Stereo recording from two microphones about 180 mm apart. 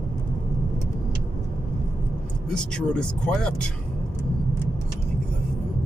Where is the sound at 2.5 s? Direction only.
5° left (ahead or behind).